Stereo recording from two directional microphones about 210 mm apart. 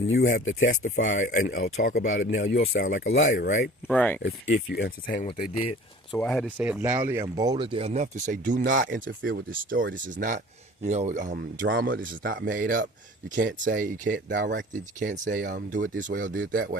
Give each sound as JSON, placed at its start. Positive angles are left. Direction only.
{"t": 0.2, "sound": "speech", "side_deg": 35}
{"t": 2.2, "sound": "speech", "side_deg": 60}
{"t": 3.0, "sound": "speech", "side_deg": 70}
{"t": 3.3, "sound": "speech", "side_deg": 40}
{"t": 3.8, "sound": "speech", "side_deg": 5}
{"t": 4.4, "sound": "speech", "side_deg": 55}
{"t": 5.5, "sound": "speech", "side_deg": 25}
{"t": 6.1, "sound": "speech", "side_deg": 5}
{"t": 11.6, "sound": "speech", "side_deg": -50}